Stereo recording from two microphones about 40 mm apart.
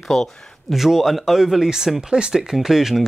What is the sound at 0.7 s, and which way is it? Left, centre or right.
Speech, centre.